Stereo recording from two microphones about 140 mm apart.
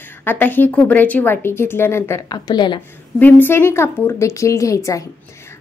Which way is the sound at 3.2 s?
15° left (ahead or behind).